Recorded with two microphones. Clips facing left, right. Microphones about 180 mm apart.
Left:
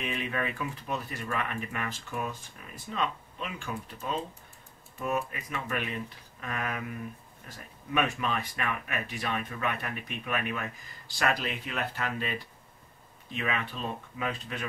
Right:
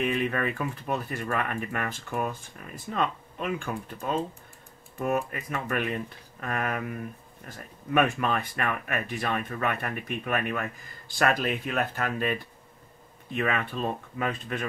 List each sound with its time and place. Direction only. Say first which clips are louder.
0.1 s speech: right 5 dB; 50° right (ahead or behind)